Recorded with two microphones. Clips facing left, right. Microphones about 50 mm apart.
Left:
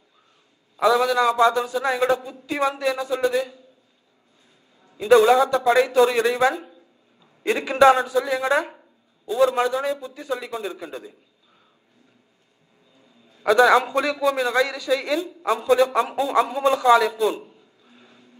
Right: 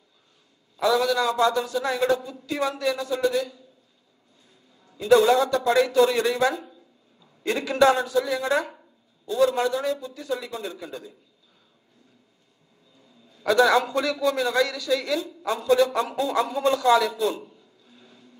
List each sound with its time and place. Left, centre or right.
0.8 s a man's voice: left
4.8 s a man's voice: left
13.3 s a man's voice: left